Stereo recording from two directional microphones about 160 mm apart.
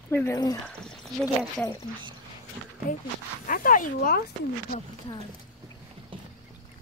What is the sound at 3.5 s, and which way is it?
Speech, 60° left (ahead or behind).